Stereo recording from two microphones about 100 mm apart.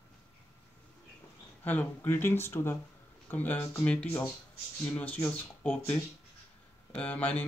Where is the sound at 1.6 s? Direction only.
20° left (ahead or behind).